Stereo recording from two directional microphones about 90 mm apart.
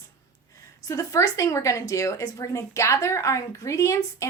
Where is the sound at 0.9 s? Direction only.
35° left (ahead or behind).